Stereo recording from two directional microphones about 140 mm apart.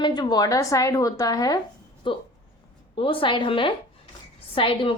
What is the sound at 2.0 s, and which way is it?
A woman's voice, 35° left (ahead or behind).